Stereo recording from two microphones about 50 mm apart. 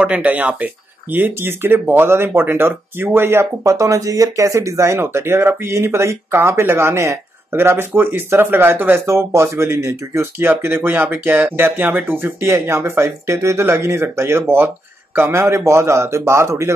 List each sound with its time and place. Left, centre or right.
0.0 s speech: right
1.1 s speech: right
9.0 s speech: right
10.6 s speech: right